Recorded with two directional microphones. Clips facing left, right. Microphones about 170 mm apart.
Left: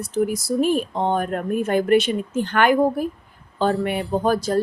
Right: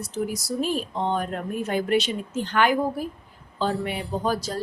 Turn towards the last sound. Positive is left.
turn(degrees=55)  # may be behind; listen again after turning